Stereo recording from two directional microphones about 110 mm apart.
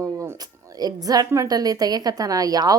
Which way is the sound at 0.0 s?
25° right (ahead or behind).